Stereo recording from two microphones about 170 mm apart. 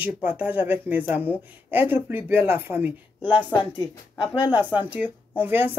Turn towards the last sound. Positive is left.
turn(degrees=-10)  # may be behind; listen again after turning